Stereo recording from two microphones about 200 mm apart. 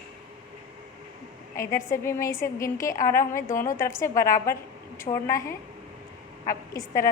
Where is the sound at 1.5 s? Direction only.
15° left (ahead or behind).